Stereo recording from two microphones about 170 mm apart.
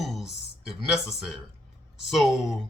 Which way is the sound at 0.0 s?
Centre (ahead or behind).